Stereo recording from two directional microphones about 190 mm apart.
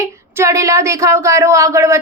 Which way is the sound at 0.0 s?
15° right (ahead or behind).